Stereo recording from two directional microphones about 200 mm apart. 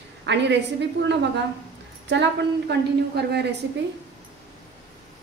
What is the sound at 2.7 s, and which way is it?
Speech, 55° right (ahead or behind).